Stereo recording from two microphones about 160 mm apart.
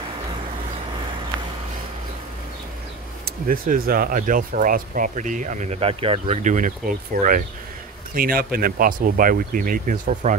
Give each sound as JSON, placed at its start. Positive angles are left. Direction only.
{"t": 3.3, "sound": "speech", "side_deg": -65}